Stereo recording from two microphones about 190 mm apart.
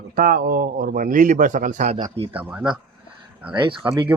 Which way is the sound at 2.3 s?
10° right (ahead or behind).